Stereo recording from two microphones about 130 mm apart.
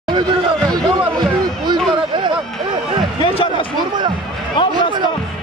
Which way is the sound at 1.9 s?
40° right (ahead or behind).